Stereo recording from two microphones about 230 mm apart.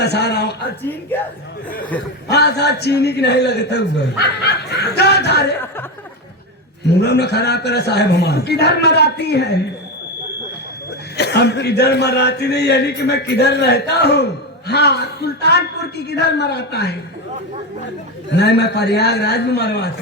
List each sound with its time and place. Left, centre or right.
0.0 s a man's voice: left
0.8 s a woman's voice: centre
2.3 s a man's voice: left
7.0 s a man's voice: left
11.2 s a man's voice: left
18.3 s a man's voice: left